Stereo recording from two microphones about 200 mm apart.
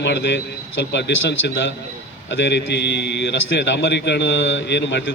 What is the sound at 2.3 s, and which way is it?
A man's voice, 60° left (ahead or behind).